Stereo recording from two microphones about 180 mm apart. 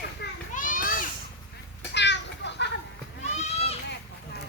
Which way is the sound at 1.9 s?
75° left (ahead or behind).